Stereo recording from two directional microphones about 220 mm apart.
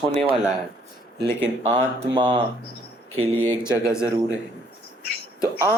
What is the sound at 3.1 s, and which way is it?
Speech, 70° right (ahead or behind).